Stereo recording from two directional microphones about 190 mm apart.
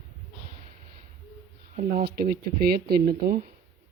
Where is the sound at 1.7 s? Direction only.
55° right (ahead or behind).